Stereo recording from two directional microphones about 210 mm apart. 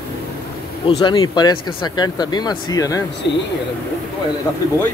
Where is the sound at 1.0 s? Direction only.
20° left (ahead or behind).